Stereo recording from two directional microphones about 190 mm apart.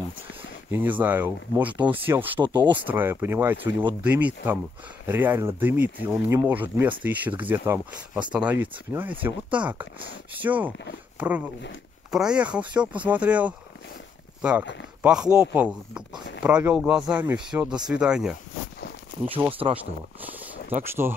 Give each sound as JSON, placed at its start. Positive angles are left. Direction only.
{"t": 0.7, "sound": "speech", "side_deg": -10}
{"t": 2.4, "sound": "speech", "side_deg": -25}
{"t": 2.9, "sound": "speech", "side_deg": -10}
{"t": 19.6, "sound": "speech", "side_deg": -30}